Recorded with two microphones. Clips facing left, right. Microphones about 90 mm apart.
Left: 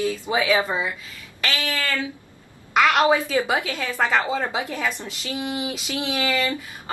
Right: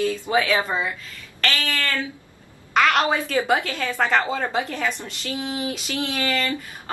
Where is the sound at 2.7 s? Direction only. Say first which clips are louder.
Left 2 dB; 5° left (ahead or behind).